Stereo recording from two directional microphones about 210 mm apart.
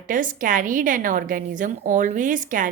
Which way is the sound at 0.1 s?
40° right (ahead or behind).